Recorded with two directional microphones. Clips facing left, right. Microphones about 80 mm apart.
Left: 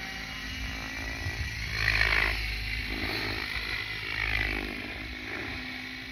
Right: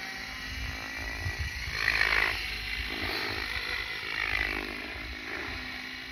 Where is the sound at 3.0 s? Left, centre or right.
Centre.